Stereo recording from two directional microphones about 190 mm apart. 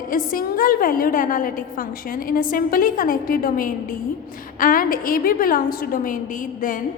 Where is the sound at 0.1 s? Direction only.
45° left (ahead or behind).